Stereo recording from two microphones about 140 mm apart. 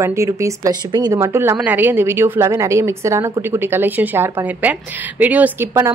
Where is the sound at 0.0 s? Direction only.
20° right (ahead or behind).